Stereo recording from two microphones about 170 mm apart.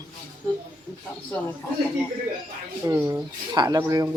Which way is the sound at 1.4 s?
15° left (ahead or behind).